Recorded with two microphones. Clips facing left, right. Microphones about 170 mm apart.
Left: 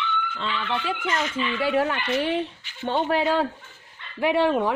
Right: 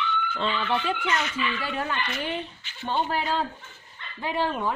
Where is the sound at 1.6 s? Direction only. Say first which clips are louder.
Left 7 dB; 75° left (ahead or behind).